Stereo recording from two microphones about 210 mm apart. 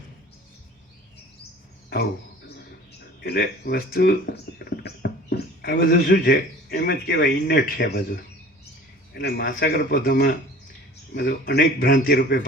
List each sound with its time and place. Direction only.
3.2 s speech: 50° left (ahead or behind)